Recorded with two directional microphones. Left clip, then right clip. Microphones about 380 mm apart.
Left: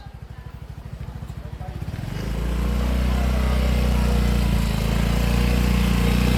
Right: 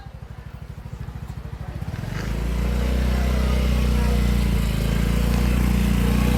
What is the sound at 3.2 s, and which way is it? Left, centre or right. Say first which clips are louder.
Vehicle: even; centre.